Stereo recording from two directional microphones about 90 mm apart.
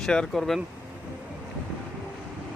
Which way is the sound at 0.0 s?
5° left (ahead or behind).